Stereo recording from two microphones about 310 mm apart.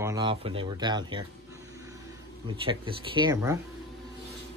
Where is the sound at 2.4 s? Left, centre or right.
Centre.